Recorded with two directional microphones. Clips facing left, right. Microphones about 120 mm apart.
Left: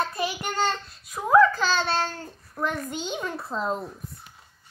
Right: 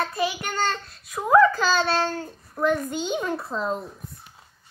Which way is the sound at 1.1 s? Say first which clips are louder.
Right 1 dB; centre (ahead or behind).